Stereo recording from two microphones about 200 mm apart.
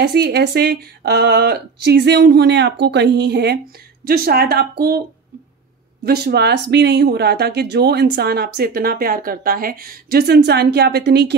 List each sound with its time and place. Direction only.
0.0 s speech: 55° right (ahead or behind)
6.0 s speech: 50° right (ahead or behind)